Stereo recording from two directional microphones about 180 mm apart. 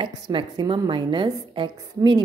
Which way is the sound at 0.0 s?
30° right (ahead or behind).